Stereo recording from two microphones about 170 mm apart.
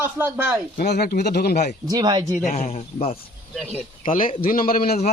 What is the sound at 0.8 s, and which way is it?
Speech, 65° left (ahead or behind).